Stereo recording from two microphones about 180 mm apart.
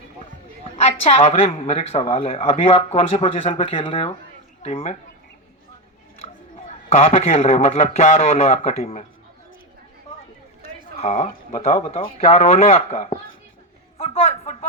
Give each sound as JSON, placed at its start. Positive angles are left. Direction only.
{"t": 0.8, "sound": "speech", "side_deg": 35}
{"t": 6.9, "sound": "speech", "side_deg": 35}
{"t": 10.9, "sound": "speech", "side_deg": 35}